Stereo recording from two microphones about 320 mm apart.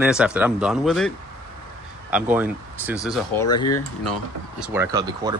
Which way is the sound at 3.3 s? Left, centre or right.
Centre.